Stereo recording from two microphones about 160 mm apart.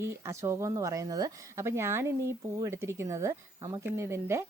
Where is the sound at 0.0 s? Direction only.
15° right (ahead or behind).